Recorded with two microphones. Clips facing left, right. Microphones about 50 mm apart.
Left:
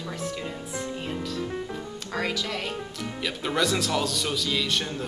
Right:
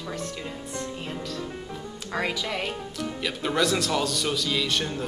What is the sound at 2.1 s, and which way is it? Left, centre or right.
Speech, centre.